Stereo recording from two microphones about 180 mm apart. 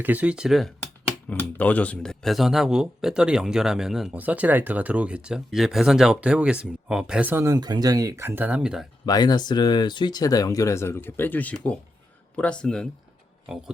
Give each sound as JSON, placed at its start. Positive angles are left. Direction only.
{"t": 0.0, "sound": "speech", "side_deg": -10}
{"t": 1.3, "sound": "speech", "side_deg": 10}
{"t": 9.0, "sound": "speech", "side_deg": 20}